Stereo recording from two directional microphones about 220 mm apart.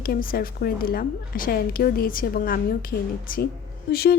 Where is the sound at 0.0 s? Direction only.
40° left (ahead or behind).